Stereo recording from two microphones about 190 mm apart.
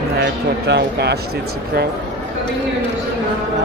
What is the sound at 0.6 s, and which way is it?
Speech, 65° right (ahead or behind).